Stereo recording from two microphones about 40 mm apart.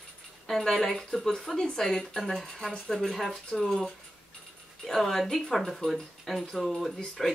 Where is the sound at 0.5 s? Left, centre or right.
Centre.